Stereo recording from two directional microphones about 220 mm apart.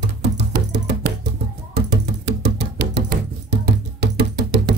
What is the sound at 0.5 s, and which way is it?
Music, 45° right (ahead or behind).